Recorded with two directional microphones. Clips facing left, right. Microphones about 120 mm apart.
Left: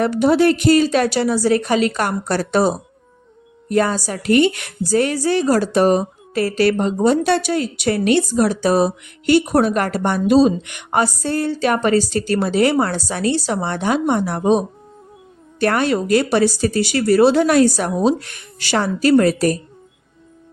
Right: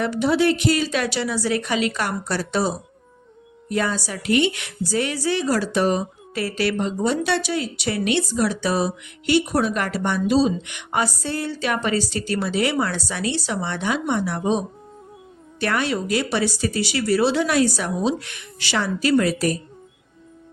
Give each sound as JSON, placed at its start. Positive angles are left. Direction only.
{"t": 0.0, "sound": "a woman's voice", "side_deg": 45}
{"t": 15.6, "sound": "a woman's voice", "side_deg": 45}